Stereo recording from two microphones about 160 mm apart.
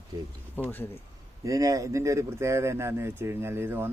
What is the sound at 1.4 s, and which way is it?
Speech, 20° right (ahead or behind).